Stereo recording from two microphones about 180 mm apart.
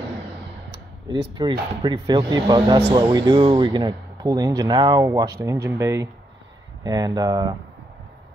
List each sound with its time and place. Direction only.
1.4 s speech: 25° right (ahead or behind)